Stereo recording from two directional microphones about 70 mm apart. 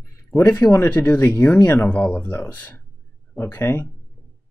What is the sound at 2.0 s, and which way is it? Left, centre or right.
Speech, centre.